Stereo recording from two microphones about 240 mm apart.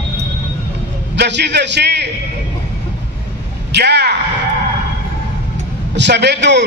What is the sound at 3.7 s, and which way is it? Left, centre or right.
Speech, right.